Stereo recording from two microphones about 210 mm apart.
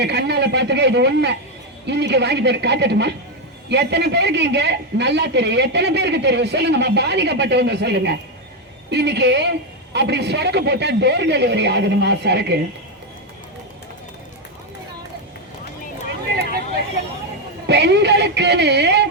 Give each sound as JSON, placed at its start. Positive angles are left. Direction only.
{"t": 0.0, "sound": "a sound", "side_deg": -55}
{"t": 1.9, "sound": "a woman's voice", "side_deg": -55}
{"t": 17.7, "sound": "a man's voice", "side_deg": -55}